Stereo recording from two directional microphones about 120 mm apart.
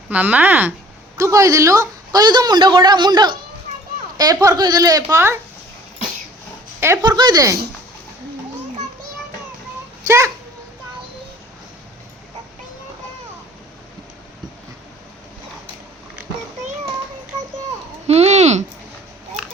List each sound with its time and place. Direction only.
0.1 s speech: 15° right (ahead or behind)
1.1 s a woman's voice: 25° right (ahead or behind)
6.7 s speech: 20° right (ahead or behind)
7.0 s a woman's voice: 35° right (ahead or behind)
10.1 s a child's voice: 25° right (ahead or behind)
18.1 s a sound: 65° right (ahead or behind)